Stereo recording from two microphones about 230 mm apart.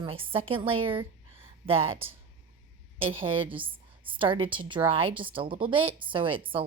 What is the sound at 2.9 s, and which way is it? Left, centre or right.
Speech, right.